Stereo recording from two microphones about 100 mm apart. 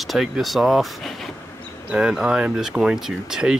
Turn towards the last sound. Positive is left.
turn(degrees=-5)  # may be behind; listen again after turning